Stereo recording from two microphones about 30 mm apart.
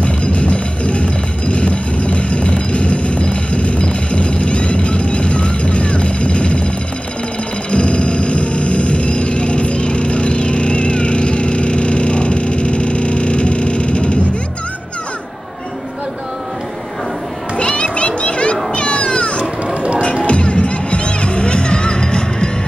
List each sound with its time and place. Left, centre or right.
0.0 s music: left
7.7 s music: left
17.6 s children playing: left
18.7 s a sound: left
20.2 s music: left